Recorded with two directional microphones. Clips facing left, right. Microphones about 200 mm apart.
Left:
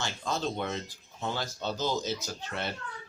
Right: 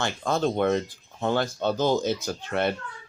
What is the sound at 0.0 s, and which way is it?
Speech, 55° right (ahead or behind).